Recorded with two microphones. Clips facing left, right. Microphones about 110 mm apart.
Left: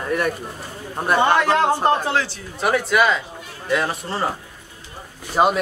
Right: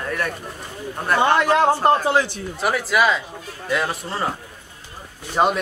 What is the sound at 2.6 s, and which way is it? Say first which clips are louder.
Speech: left 1 dB; centre (ahead or behind).